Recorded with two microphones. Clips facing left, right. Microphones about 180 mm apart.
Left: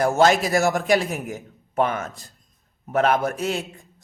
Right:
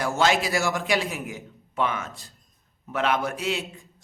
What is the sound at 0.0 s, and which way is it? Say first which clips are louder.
A man's voice: left 5 dB; 45° left (ahead or behind).